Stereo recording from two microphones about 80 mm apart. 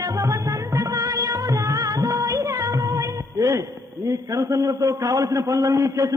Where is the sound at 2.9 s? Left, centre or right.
Right.